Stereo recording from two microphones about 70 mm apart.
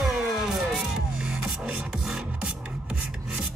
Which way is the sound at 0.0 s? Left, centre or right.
Centre.